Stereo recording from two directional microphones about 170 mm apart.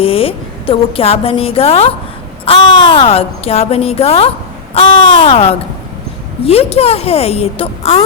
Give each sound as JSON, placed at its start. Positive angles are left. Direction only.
{"t": 0.0, "sound": "a woman's voice", "side_deg": 35}